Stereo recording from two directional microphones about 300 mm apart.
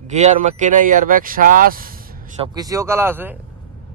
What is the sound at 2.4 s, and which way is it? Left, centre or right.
Speech, centre.